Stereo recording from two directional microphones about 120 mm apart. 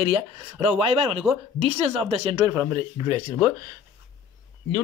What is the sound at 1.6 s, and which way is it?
Speech, 60° right (ahead or behind).